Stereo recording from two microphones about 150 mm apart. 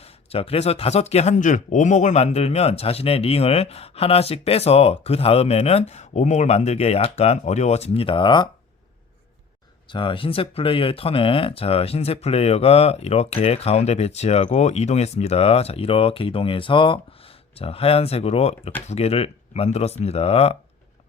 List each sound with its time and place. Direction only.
0.3 s speech: 40° left (ahead or behind)
9.9 s speech: 35° left (ahead or behind)